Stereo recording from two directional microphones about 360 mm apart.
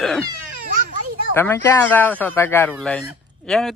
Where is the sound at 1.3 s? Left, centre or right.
Centre.